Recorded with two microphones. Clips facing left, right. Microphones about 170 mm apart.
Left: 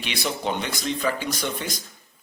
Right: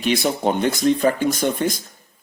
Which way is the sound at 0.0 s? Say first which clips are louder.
Right 8 dB; 45° right (ahead or behind).